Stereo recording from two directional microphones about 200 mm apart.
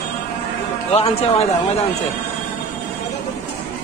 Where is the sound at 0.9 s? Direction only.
30° left (ahead or behind).